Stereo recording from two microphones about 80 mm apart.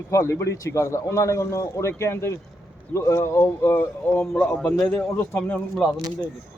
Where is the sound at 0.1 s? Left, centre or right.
Left; by 5.0 s centre.